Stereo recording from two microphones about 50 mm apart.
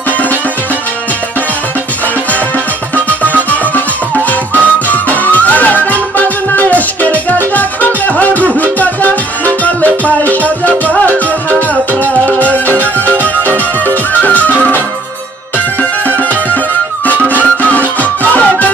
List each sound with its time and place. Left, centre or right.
4.8 s music: left
12.3 s music: left
17.1 s music: left